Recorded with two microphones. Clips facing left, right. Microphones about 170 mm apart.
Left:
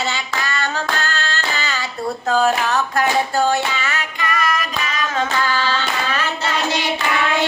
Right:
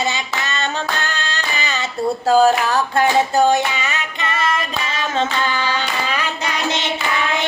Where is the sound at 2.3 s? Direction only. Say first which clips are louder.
Right 3 dB; 35° right (ahead or behind).